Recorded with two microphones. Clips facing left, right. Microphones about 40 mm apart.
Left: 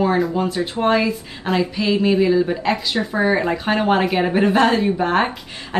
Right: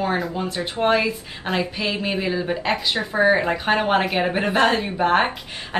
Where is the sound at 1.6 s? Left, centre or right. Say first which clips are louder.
Left 7 dB; right.